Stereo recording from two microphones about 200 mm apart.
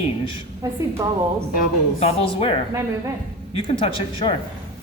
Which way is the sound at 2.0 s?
30° left (ahead or behind).